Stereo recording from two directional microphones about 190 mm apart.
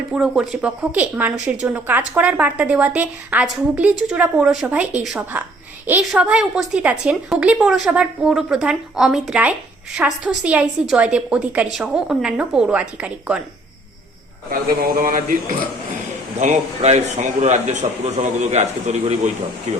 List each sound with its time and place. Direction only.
0.1 s a woman's voice: 5° right (ahead or behind)
14.5 s a man's voice: 50° right (ahead or behind)